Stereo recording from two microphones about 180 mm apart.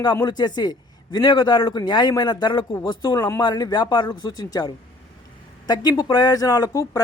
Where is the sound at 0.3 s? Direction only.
25° left (ahead or behind).